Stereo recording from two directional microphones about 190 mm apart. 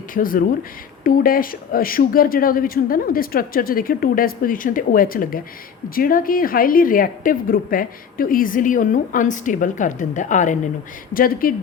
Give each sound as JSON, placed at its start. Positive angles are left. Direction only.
{"t": 0.1, "sound": "a woman's voice", "side_deg": 45}